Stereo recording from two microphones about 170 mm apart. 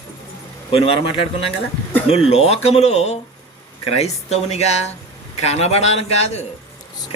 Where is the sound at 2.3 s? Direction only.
40° left (ahead or behind).